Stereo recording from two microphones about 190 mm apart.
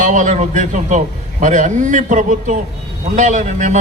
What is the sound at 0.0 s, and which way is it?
A man's voice, 40° right (ahead or behind).